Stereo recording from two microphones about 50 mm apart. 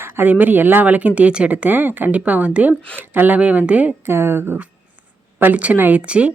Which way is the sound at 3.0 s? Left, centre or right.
Right.